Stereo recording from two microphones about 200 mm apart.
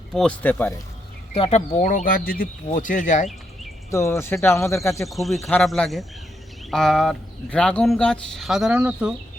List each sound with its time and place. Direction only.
0.1 s speech: 5° left (ahead or behind)
1.3 s speech: 30° left (ahead or behind)
3.9 s speech: 15° left (ahead or behind)
5.0 s speech: centre (ahead or behind)